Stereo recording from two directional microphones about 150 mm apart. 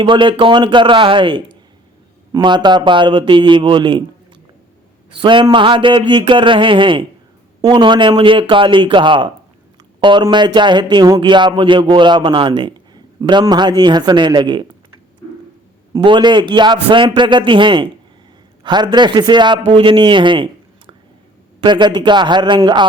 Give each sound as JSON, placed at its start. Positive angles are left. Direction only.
{"t": 0.0, "sound": "speech", "side_deg": -35}
{"t": 5.2, "sound": "speech", "side_deg": -30}
{"t": 15.9, "sound": "a man's voice", "side_deg": -30}